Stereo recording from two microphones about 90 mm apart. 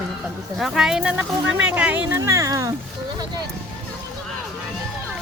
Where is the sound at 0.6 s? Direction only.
5° right (ahead or behind).